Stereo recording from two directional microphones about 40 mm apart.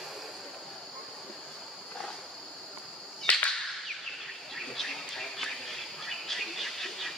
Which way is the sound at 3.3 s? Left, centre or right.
Left.